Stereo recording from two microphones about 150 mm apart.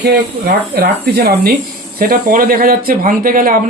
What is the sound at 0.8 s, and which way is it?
Speech, 90° right.